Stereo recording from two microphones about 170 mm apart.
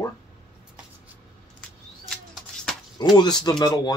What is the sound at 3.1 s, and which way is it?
Speech, 25° left (ahead or behind).